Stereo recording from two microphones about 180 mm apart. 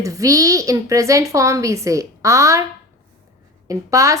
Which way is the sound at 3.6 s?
15° right (ahead or behind).